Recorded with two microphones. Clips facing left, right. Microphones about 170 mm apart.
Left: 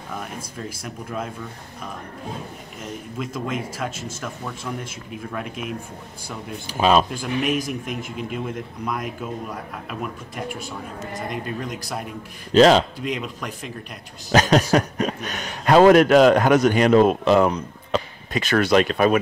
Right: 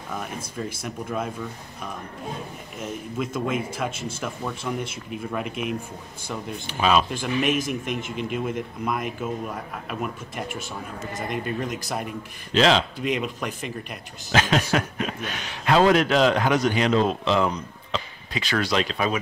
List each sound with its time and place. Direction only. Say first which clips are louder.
0.6 s speech: right 4 dB; centre (ahead or behind)
2.8 s speech: right 2 dB; 5° right (ahead or behind)
6.7 s speech: left 3 dB; 35° left (ahead or behind)
7.1 s speech: even; centre (ahead or behind)
12.5 s a man's voice: left 6 dB; 45° left (ahead or behind)
13.0 s speech: right 2 dB; 5° right (ahead or behind)
14.3 s a man's voice: left 5 dB; 40° left (ahead or behind)